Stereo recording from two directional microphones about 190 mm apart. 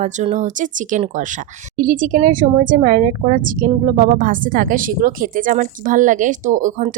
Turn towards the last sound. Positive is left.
turn(degrees=-40)  # may be behind; listen again after turning